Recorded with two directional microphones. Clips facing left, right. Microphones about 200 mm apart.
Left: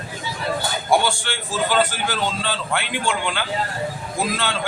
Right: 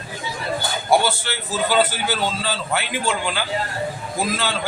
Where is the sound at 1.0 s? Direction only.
5° right (ahead or behind).